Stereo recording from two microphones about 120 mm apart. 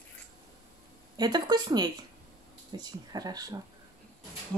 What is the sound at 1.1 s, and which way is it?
A woman's voice, 35° right (ahead or behind).